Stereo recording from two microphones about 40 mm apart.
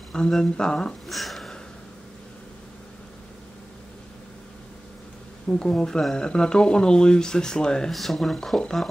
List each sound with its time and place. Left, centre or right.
0.3 s speech: centre
1.0 s a sound: centre
5.5 s speech: centre
7.9 s speech: centre